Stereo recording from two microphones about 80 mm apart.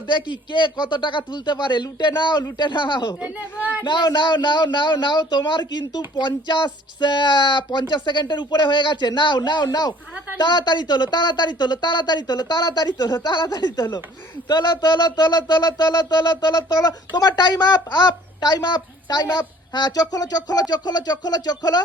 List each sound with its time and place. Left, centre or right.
0.1 s a man's voice: left
3.2 s speech: centre
3.8 s a man's voice: left